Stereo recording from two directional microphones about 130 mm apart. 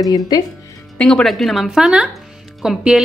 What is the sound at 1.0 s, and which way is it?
Speech, 5° left (ahead or behind).